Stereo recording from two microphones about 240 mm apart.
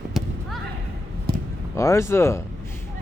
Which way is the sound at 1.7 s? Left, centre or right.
Centre.